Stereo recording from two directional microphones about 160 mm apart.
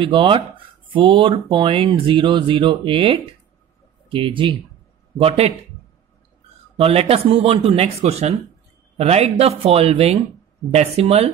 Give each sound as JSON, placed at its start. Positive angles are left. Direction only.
{"t": 0.0, "sound": "speech", "side_deg": -30}
{"t": 6.8, "sound": "speech", "side_deg": -40}